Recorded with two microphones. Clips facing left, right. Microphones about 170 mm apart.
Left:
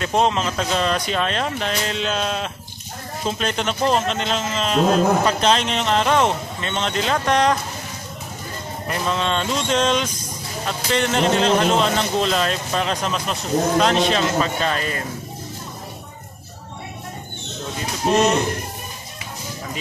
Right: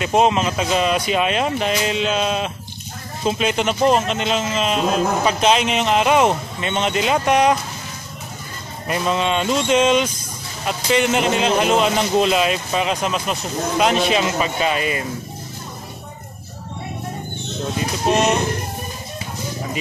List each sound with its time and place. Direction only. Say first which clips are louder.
0.0 s a man's voice: right 3 dB; 10° right (ahead or behind)
8.8 s a man's voice: right 3 dB; 10° right (ahead or behind)